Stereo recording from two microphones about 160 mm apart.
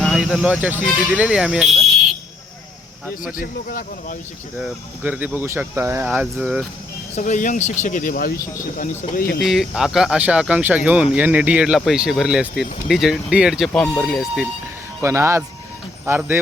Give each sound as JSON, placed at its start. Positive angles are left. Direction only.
{"t": 0.0, "sound": "speech", "side_deg": -5}
{"t": 3.3, "sound": "speech", "side_deg": 60}
{"t": 4.5, "sound": "speech", "side_deg": -10}
{"t": 7.2, "sound": "speech", "side_deg": 50}
{"t": 8.8, "sound": "speech", "side_deg": 50}
{"t": 9.4, "sound": "speech", "side_deg": 0}
{"t": 15.0, "sound": "speech", "side_deg": -15}